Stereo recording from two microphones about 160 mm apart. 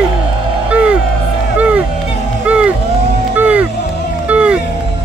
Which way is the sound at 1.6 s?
10° right (ahead or behind).